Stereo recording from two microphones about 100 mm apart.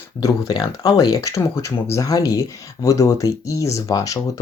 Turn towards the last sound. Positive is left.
turn(degrees=35)  # may be behind; listen again after turning